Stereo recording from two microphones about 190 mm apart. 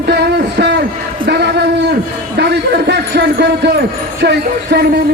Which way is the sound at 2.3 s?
60° right (ahead or behind).